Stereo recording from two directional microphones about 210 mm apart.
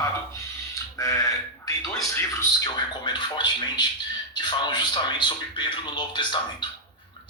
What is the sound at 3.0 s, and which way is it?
Speech, 20° left (ahead or behind).